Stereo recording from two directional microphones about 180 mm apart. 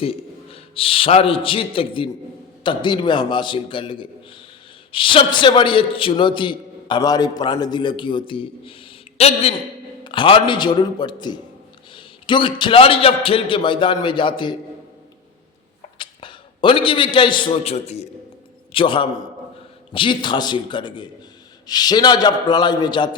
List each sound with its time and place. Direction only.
0.0 s a man's voice: 30° left (ahead or behind)
16.0 s a man's voice: 30° left (ahead or behind)